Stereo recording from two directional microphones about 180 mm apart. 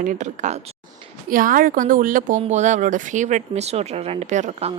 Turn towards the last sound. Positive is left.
turn(degrees=-40)  # may be behind; listen again after turning